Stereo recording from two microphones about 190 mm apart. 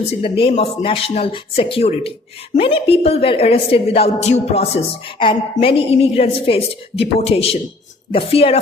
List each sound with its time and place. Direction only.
0.1 s a woman's voice: 30° left (ahead or behind)